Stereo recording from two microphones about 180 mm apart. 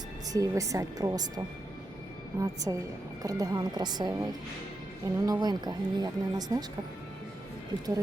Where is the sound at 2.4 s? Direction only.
20° right (ahead or behind).